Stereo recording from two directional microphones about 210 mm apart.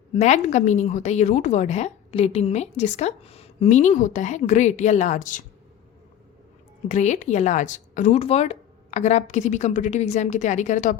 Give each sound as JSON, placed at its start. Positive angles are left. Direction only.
{"t": 0.1, "sound": "a woman's voice", "side_deg": 35}
{"t": 6.8, "sound": "a woman's voice", "side_deg": 35}